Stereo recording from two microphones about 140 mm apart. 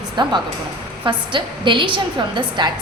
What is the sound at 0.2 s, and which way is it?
A woman's voice, 30° right (ahead or behind).